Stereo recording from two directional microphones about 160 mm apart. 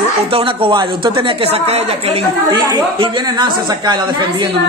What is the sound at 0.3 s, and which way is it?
Speech, 35° right (ahead or behind).